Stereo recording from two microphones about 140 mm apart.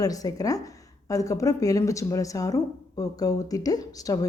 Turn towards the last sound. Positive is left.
turn(degrees=25)  # may be behind; listen again after turning